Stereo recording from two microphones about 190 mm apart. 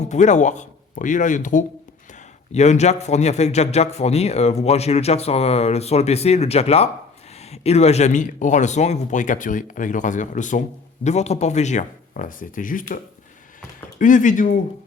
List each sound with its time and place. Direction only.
0.0 s a man's voice: 40° left (ahead or behind)
14.0 s speech: 40° left (ahead or behind)